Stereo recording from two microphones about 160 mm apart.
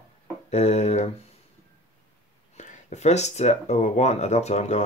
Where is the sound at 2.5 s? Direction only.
45° left (ahead or behind).